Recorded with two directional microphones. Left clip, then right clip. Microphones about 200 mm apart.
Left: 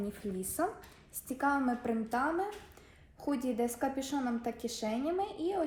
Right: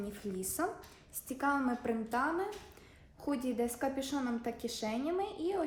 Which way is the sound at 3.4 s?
15° left (ahead or behind).